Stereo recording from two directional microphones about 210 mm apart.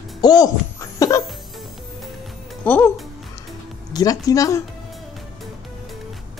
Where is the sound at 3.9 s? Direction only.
15° left (ahead or behind).